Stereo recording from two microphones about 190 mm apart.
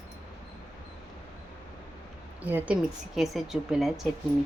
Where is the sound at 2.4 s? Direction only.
10° right (ahead or behind).